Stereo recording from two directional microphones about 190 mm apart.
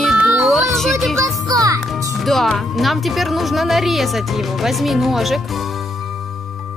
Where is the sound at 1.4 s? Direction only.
20° right (ahead or behind).